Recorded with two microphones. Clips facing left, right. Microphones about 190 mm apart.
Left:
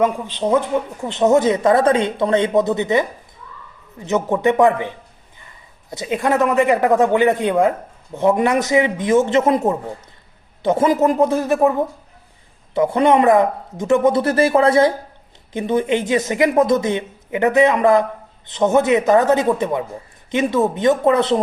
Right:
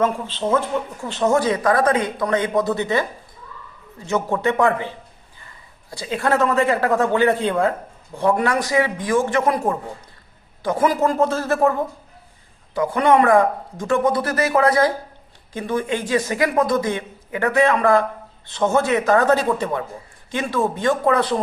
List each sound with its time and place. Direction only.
0.0 s a woman's voice: 15° left (ahead or behind)
12.7 s a woman's voice: 25° left (ahead or behind)